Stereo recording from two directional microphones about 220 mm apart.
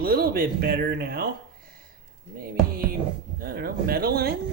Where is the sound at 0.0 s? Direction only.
45° right (ahead or behind).